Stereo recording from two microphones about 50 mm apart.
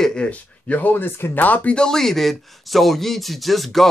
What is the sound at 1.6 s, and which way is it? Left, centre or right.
Speech, centre.